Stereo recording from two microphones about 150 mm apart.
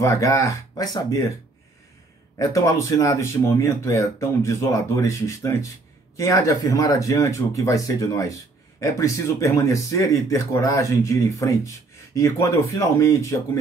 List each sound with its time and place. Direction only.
0.0 s speech: 20° left (ahead or behind)
2.3 s speech: 20° left (ahead or behind)